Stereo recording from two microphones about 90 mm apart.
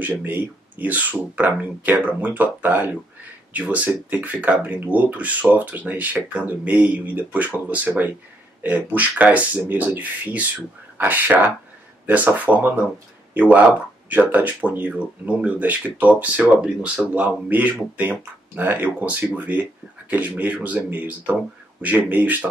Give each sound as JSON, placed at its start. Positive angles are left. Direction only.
{"t": 0.0, "sound": "speech", "side_deg": -20}